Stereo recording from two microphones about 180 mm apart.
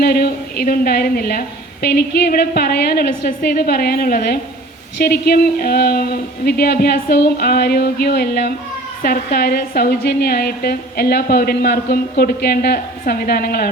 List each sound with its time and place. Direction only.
0.0 s a woman's voice: 60° left (ahead or behind)